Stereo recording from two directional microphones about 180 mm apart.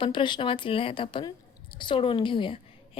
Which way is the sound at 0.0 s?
25° left (ahead or behind).